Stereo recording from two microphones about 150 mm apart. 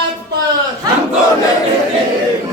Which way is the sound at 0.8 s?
25° right (ahead or behind).